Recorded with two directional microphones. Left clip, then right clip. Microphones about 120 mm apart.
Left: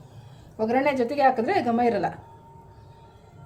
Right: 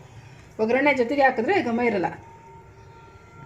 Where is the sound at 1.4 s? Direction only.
15° right (ahead or behind).